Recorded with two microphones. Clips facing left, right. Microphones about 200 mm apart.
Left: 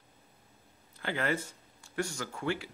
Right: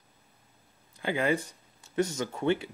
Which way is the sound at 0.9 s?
15° right (ahead or behind).